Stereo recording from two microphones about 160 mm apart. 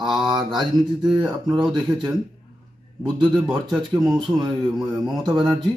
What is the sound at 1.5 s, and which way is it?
Speech, 25° right (ahead or behind).